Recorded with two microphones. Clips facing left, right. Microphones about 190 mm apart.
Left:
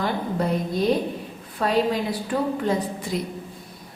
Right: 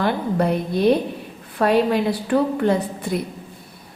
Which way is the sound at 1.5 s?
65° right (ahead or behind).